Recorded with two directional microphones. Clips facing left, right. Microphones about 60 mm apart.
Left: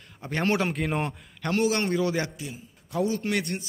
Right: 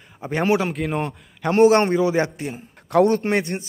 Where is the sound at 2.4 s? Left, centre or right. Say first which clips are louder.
Right 8 dB; right.